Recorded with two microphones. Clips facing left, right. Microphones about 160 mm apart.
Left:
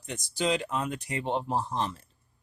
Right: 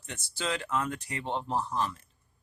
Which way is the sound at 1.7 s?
25° left (ahead or behind).